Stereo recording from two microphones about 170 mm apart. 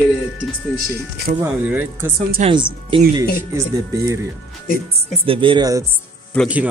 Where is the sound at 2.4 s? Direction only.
30° right (ahead or behind).